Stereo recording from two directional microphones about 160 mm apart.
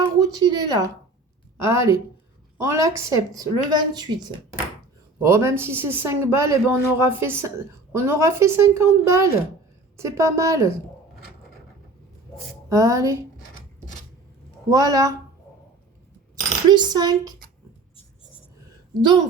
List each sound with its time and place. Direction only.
0.2 s a man's voice: 25° right (ahead or behind)
12.6 s speech: 20° right (ahead or behind)
14.7 s speech: 25° right (ahead or behind)
16.3 s speech: 25° right (ahead or behind)